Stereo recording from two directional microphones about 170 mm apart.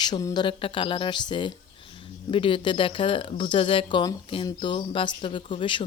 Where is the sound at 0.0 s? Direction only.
20° left (ahead or behind).